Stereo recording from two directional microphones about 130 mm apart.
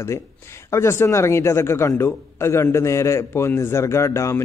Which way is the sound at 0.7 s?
20° left (ahead or behind).